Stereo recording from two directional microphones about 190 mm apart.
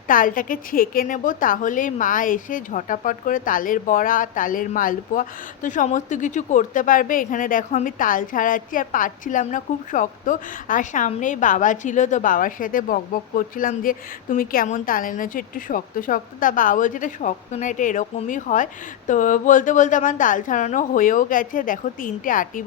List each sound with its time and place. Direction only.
0.1 s a woman's voice: 45° left (ahead or behind)